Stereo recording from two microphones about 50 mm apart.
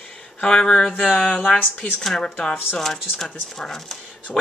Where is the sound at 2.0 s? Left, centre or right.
Centre.